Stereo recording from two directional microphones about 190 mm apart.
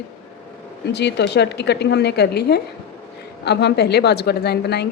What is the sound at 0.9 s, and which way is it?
A woman's voice, 65° left (ahead or behind).